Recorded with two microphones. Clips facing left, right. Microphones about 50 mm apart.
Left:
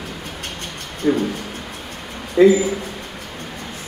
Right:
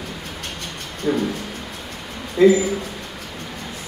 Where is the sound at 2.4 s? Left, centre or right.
Left.